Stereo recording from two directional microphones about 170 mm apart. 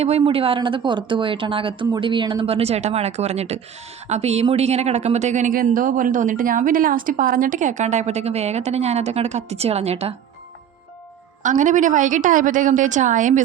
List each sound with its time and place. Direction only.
0.0 s a woman's voice: 35° right (ahead or behind)
11.4 s a woman's voice: 50° right (ahead or behind)